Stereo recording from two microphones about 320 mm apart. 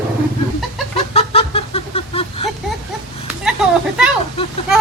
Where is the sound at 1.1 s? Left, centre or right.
Centre.